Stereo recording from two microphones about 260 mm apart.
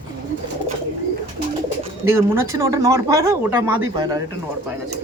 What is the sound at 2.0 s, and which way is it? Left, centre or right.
Speech, centre.